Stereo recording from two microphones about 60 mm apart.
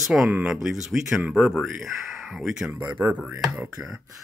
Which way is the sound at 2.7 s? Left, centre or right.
Right.